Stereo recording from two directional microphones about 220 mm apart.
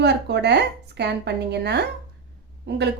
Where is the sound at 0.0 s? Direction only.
50° right (ahead or behind).